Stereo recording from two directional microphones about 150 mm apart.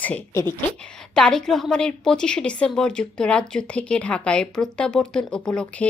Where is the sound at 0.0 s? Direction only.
10° left (ahead or behind).